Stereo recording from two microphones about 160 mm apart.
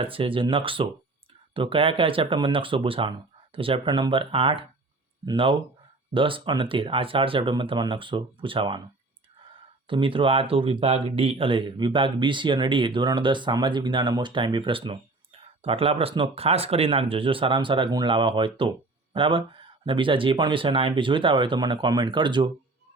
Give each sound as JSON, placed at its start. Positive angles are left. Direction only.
{"t": 0.0, "sound": "speech", "side_deg": -35}
{"t": 9.8, "sound": "speech", "side_deg": -30}